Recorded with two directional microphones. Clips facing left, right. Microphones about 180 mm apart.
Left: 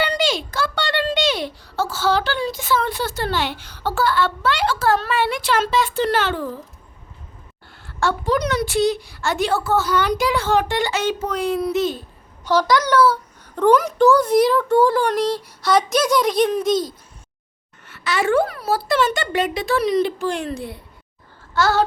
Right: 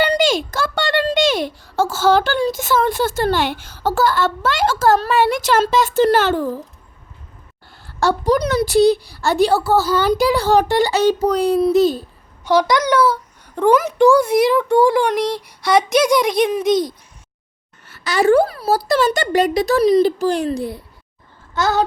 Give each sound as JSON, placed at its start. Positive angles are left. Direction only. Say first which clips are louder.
{"t": 0.0, "sound": "a child's voice", "louder": "right 5 dB", "side_deg": -45}
{"t": 7.9, "sound": "speech", "louder": "right 4 dB", "side_deg": -40}
{"t": 12.5, "sound": "speech", "louder": "right 2 dB", "side_deg": -15}
{"t": 17.8, "sound": "speech", "louder": "right 6 dB", "side_deg": -40}
{"t": 21.5, "sound": "a sound", "louder": "even", "side_deg": -20}